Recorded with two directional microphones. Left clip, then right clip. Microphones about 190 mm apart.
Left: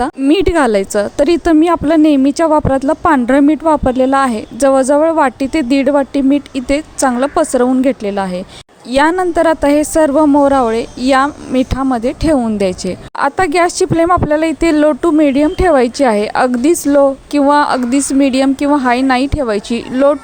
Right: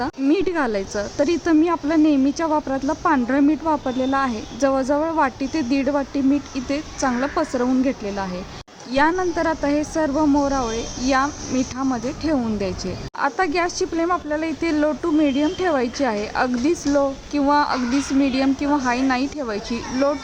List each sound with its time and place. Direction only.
0.0 s speech: 40° left (ahead or behind)